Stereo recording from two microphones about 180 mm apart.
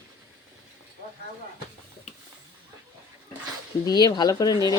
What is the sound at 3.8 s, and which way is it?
Speech, 25° left (ahead or behind).